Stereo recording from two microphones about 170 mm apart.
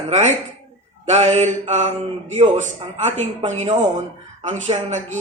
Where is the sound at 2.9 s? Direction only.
40° right (ahead or behind).